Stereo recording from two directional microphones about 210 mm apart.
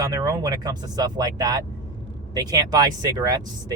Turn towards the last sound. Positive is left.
turn(degrees=-15)  # may be behind; listen again after turning